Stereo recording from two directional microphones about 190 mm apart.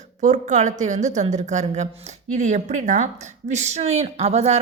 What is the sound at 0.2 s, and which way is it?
A woman's voice, 40° right (ahead or behind).